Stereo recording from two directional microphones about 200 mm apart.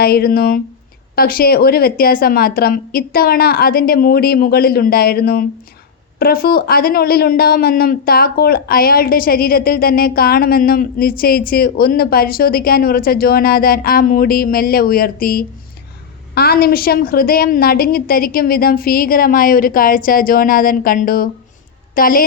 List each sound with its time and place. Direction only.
0.0 s speech: 50° left (ahead or behind)